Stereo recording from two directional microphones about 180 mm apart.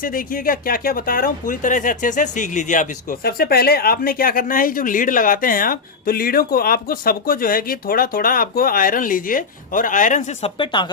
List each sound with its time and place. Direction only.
0.0 s speech: 50° left (ahead or behind)
10.6 s speech: 25° left (ahead or behind)